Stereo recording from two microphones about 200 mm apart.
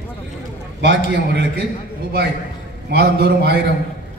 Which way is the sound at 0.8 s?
60° right (ahead or behind).